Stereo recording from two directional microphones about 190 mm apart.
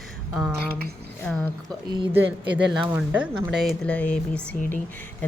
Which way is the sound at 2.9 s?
10° right (ahead or behind).